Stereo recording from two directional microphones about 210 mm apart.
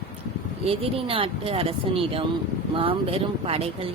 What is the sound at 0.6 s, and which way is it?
Speech, 25° right (ahead or behind).